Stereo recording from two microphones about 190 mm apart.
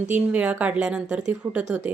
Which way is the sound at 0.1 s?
5° right (ahead or behind).